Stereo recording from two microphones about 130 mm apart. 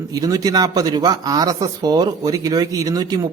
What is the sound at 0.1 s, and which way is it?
Speech, 30° right (ahead or behind).